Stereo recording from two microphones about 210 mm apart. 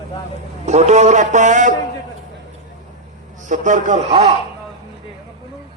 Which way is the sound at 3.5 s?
35° right (ahead or behind).